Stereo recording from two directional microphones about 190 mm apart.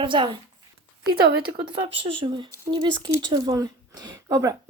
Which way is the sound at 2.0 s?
25° right (ahead or behind).